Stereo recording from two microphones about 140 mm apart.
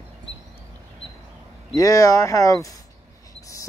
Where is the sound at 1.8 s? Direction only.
25° left (ahead or behind).